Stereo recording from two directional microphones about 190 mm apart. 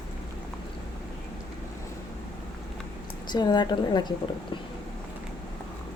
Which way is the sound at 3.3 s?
20° left (ahead or behind).